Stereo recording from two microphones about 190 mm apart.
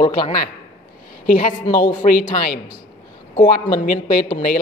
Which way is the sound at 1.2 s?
45° left (ahead or behind).